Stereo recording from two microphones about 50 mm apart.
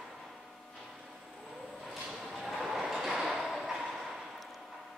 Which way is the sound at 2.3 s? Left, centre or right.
Centre.